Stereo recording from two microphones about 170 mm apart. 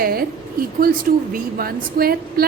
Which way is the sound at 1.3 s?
60° right (ahead or behind).